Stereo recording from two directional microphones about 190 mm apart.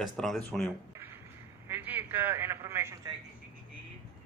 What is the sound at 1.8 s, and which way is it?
A man's voice, 10° right (ahead or behind).